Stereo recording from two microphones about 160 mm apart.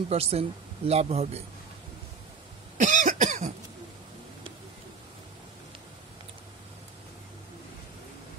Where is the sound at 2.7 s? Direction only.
50° right (ahead or behind).